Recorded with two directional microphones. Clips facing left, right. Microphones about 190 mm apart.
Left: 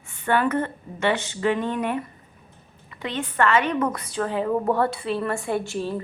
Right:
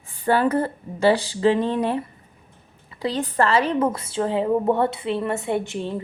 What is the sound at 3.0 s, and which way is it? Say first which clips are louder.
A woman's voice: right 2 dB; 35° right (ahead or behind).